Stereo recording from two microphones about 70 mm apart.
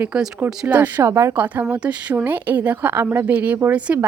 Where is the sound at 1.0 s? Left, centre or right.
Right.